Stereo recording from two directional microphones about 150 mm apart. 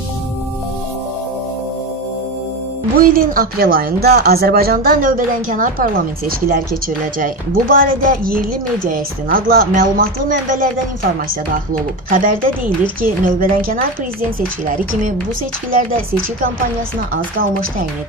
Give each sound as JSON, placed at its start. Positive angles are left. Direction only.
{"t": 3.0, "sound": "a woman's voice", "side_deg": -70}
{"t": 12.1, "sound": "a woman's voice", "side_deg": -65}
{"t": 17.1, "sound": "a woman's voice", "side_deg": -70}